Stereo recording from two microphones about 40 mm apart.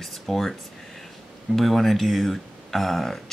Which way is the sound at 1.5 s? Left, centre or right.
Centre.